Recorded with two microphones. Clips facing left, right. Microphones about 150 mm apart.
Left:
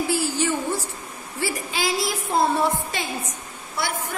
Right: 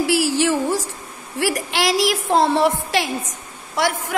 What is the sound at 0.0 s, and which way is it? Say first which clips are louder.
Speech: right 5 dB; 90° right.